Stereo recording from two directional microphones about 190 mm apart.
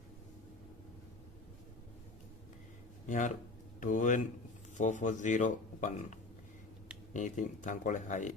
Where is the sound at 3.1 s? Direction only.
40° left (ahead or behind).